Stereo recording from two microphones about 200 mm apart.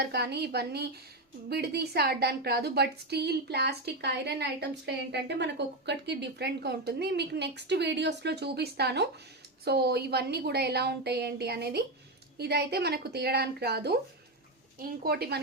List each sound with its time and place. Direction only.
0.0 s a woman's voice: 55° right (ahead or behind)